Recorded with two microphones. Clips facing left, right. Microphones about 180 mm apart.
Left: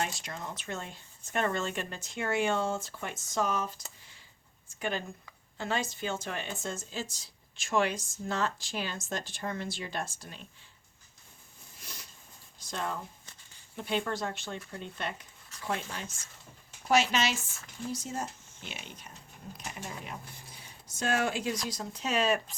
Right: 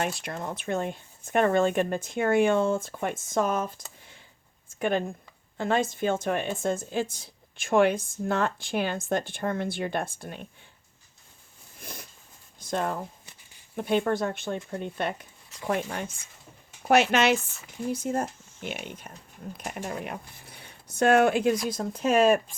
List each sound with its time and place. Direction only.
0.0 s speech: 55° right (ahead or behind)
11.8 s a sound: 50° right (ahead or behind)
12.5 s speech: 55° right (ahead or behind)